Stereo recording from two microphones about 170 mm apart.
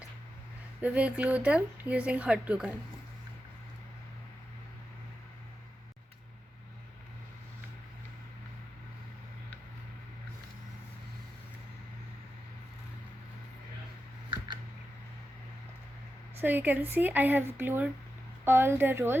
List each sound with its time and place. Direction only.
0.8 s speech: 10° right (ahead or behind)
14.3 s a sound: 25° right (ahead or behind)
16.4 s speech: 10° right (ahead or behind)